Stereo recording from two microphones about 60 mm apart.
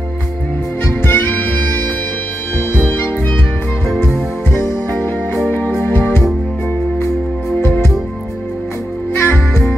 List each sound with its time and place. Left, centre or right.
0.8 s music: left
4.1 s music: left
7.6 s music: left
9.1 s music: left